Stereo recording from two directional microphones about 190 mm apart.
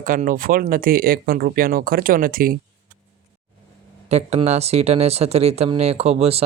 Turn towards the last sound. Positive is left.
turn(degrees=-30)  # may be behind; listen again after turning